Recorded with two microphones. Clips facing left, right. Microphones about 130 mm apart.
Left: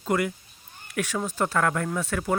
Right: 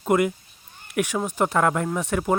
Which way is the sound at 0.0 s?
20° right (ahead or behind).